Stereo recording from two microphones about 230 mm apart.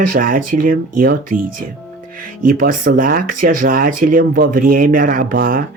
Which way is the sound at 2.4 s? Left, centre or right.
Right.